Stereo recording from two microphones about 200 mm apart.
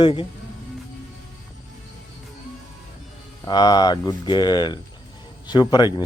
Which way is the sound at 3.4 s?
20° left (ahead or behind).